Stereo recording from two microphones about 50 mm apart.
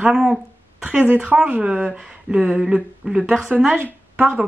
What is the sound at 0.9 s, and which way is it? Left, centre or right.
Speech, right.